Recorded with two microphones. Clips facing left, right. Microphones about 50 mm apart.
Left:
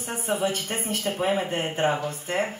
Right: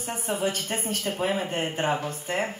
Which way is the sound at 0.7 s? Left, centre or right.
Left.